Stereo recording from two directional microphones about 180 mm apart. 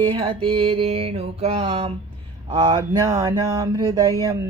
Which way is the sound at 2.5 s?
25° right (ahead or behind).